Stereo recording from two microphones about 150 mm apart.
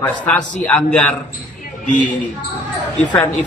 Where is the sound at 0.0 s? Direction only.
10° left (ahead or behind).